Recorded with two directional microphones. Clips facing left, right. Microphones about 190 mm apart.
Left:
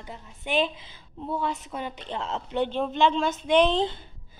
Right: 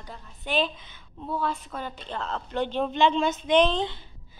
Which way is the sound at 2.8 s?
5° left (ahead or behind).